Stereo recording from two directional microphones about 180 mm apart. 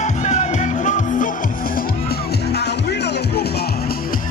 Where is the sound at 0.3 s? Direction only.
40° left (ahead or behind).